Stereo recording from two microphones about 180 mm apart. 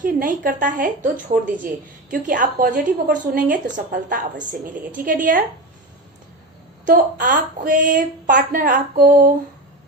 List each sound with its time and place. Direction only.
0.0 s a woman's voice: 50° right (ahead or behind)
6.8 s a woman's voice: 50° right (ahead or behind)